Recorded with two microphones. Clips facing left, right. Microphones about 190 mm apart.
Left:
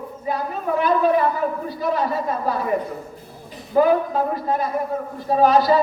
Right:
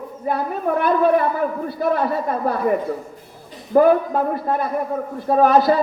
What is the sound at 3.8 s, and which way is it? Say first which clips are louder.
A man's voice: right 3 dB; 55° right (ahead or behind).